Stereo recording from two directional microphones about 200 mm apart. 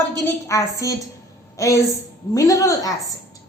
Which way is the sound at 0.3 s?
15° left (ahead or behind).